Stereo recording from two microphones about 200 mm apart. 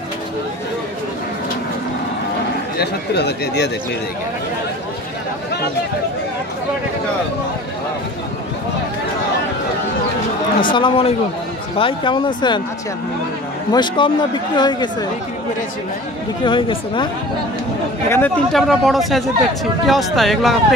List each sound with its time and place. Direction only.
2.8 s speech: 55° left (ahead or behind)
10.7 s speech: 25° left (ahead or behind)
13.7 s speech: 25° left (ahead or behind)
16.4 s speech: 25° left (ahead or behind)
18.1 s speech: 5° left (ahead or behind)